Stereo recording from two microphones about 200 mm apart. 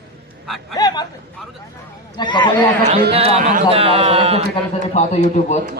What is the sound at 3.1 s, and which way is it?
Speech, 30° right (ahead or behind).